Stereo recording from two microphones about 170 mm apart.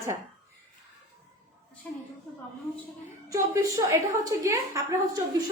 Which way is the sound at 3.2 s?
20° right (ahead or behind).